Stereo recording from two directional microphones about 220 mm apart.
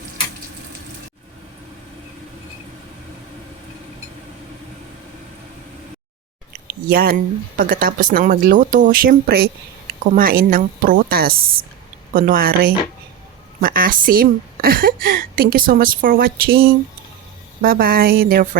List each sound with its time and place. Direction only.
6.9 s a woman's voice: 40° right (ahead or behind)